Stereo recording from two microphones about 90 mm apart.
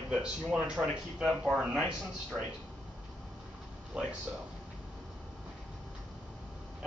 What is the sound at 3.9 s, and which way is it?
Speech, 10° right (ahead or behind).